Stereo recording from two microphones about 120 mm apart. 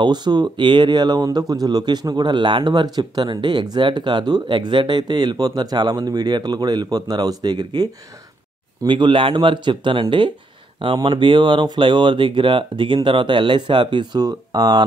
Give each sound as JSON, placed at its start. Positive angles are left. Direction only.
{"t": 0.0, "sound": "speech", "side_deg": -40}